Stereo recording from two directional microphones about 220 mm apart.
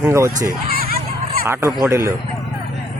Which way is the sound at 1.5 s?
10° right (ahead or behind).